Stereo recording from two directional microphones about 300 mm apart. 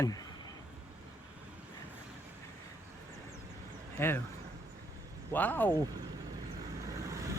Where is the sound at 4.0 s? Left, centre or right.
Centre.